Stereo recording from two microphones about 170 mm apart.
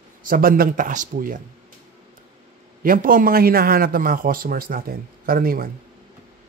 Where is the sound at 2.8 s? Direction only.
55° right (ahead or behind).